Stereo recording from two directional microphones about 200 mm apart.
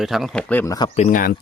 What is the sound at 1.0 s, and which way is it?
Speech, 40° left (ahead or behind).